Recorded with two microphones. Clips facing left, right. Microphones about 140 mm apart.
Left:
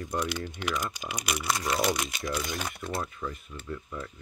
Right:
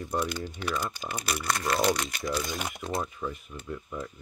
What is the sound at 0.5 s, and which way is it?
Speech, 15° left (ahead or behind).